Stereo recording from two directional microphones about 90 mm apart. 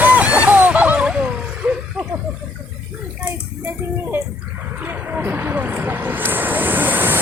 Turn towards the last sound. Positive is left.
turn(degrees=-20)  # may be behind; listen again after turning